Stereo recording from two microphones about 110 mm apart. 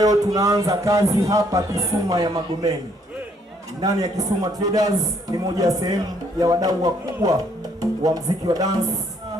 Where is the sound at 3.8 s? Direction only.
35° right (ahead or behind).